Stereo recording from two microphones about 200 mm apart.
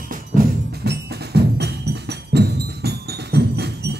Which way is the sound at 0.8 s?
55° right (ahead or behind).